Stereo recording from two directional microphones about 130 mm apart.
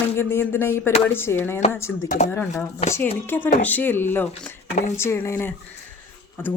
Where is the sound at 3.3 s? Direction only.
15° left (ahead or behind).